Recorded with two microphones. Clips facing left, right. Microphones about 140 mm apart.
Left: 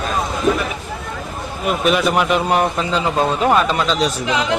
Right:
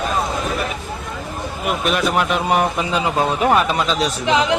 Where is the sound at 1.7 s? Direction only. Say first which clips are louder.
Left 3 dB; centre (ahead or behind).